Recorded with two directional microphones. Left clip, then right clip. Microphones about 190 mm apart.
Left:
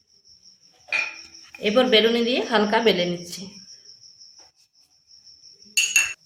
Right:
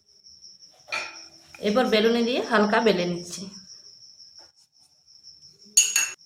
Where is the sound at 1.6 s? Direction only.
20° left (ahead or behind).